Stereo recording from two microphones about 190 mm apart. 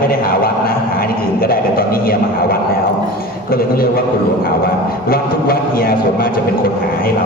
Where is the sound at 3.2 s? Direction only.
50° left (ahead or behind).